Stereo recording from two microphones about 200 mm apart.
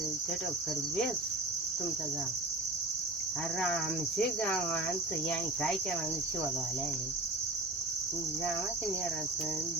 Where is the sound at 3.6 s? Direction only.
Centre (ahead or behind).